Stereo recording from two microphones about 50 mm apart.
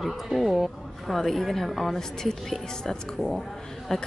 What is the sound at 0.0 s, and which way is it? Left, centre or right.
A woman's voice, centre.